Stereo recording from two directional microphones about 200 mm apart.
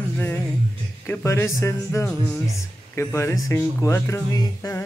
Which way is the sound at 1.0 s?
15° left (ahead or behind).